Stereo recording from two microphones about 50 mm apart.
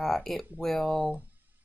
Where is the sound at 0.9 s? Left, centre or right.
Right.